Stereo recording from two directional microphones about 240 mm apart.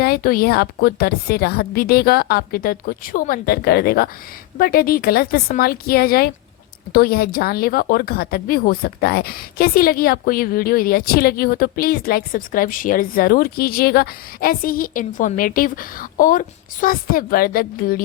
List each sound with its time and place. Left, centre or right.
0.0 s a woman's voice: left